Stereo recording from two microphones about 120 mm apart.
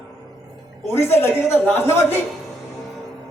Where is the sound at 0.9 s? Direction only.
20° left (ahead or behind).